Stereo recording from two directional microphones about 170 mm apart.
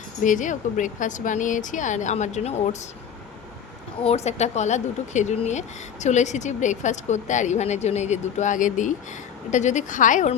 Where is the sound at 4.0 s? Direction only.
40° left (ahead or behind).